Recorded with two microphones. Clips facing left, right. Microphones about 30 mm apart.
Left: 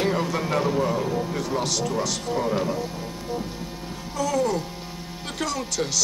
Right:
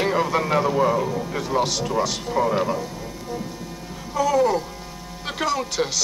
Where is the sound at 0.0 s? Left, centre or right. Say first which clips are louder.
Right 3 dB; centre.